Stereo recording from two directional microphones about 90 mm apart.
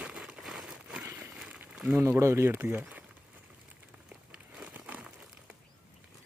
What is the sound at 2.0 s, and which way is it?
Speech, 30° right (ahead or behind).